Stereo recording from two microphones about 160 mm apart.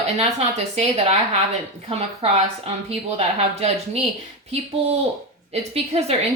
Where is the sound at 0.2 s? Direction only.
40° right (ahead or behind).